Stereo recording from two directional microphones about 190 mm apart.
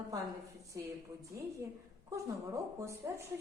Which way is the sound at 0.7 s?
15° right (ahead or behind).